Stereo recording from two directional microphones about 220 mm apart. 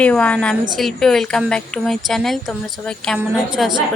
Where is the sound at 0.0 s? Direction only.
5° left (ahead or behind).